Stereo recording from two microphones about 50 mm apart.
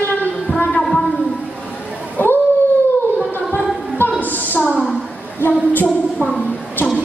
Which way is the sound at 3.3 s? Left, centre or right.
Left.